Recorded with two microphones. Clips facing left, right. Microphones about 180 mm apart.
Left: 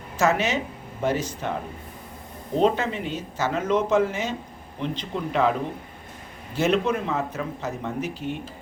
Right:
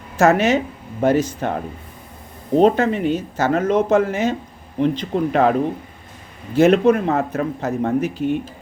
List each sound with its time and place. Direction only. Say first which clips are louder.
0.2 s speech: right 7 dB; 55° right (ahead or behind)
2.6 s speech: right 7 dB; 50° right (ahead or behind)
6.6 s speech: right 9 dB; 55° right (ahead or behind)